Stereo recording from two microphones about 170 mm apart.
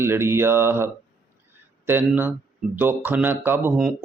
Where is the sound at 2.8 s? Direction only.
10° right (ahead or behind).